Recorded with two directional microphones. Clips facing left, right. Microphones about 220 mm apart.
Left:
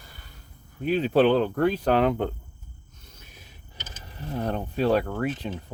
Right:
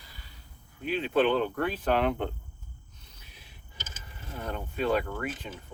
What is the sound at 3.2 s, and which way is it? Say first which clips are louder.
Vehicle: left 4 dB; 45° left (ahead or behind).